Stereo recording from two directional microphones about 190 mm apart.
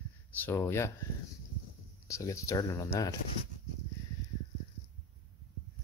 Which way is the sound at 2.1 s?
15° left (ahead or behind).